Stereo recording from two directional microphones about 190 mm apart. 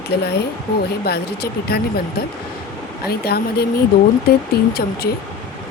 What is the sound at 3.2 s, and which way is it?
Speech, 55° left (ahead or behind).